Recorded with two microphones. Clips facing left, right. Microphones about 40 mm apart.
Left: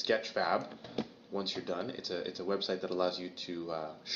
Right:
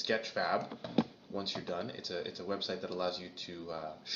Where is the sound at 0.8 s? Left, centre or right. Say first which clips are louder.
Right 6 dB; right.